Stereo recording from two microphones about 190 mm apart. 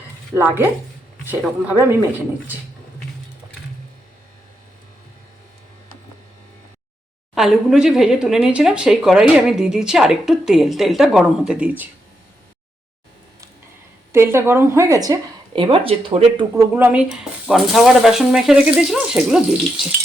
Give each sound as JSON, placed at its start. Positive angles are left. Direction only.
{"t": 0.3, "sound": "a woman's voice", "side_deg": -10}
{"t": 7.3, "sound": "speech", "side_deg": 0}
{"t": 14.1, "sound": "a woman's voice", "side_deg": -15}
{"t": 16.6, "sound": "a woman's voice", "side_deg": -10}